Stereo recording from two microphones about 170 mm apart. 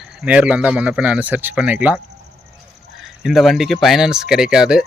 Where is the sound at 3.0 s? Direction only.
Centre (ahead or behind).